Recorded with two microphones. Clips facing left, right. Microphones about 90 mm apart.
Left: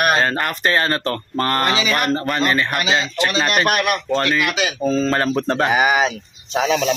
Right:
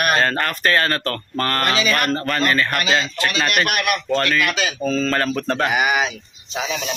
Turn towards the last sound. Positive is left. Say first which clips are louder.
# left 7 dB
turn(degrees=50)  # may be behind; listen again after turning